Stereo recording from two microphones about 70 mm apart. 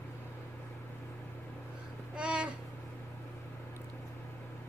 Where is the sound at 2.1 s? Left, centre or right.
Centre.